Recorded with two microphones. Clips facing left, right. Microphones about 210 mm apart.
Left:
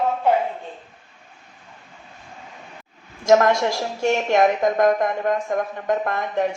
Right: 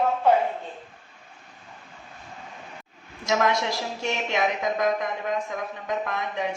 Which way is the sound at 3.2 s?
50° left (ahead or behind).